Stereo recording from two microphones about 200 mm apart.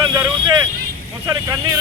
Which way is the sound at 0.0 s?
20° right (ahead or behind).